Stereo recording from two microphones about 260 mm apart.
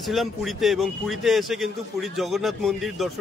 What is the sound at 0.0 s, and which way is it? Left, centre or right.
Speech, centre.